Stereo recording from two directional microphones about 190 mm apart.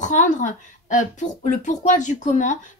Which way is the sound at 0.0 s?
40° left (ahead or behind).